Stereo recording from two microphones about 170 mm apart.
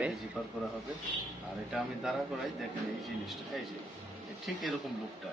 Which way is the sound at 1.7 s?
Centre (ahead or behind).